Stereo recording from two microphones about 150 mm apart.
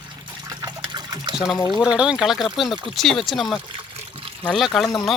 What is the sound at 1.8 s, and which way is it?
Speech, 5° right (ahead or behind).